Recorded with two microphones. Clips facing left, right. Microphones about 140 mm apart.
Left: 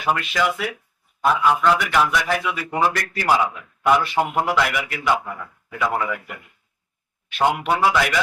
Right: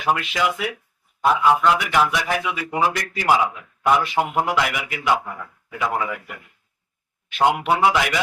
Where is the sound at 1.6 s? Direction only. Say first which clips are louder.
Even; 15° right (ahead or behind).